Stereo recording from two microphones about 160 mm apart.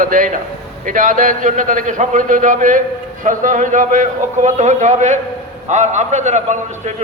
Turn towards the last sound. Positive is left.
turn(degrees=-45)  # may be behind; listen again after turning